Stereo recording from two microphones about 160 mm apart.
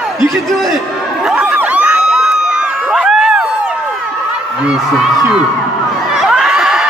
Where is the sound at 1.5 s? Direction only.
10° right (ahead or behind).